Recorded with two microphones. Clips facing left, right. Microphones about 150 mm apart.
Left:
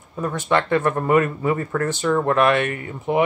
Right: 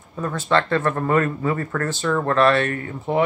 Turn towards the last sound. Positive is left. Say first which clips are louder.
# left 1 dB
turn(degrees=15)  # may be behind; listen again after turning